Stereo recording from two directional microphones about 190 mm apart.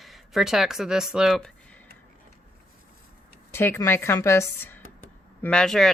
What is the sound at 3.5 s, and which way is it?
A woman's voice, 10° left (ahead or behind).